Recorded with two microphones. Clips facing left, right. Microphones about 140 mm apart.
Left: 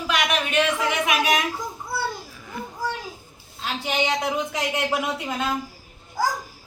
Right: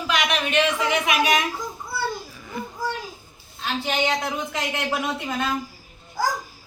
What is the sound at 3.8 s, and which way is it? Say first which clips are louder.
Speech: even; 10° left (ahead or behind).